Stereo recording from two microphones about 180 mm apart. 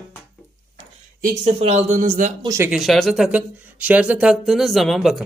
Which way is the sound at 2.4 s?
15° right (ahead or behind).